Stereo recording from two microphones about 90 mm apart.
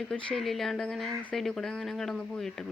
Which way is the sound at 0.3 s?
5° left (ahead or behind).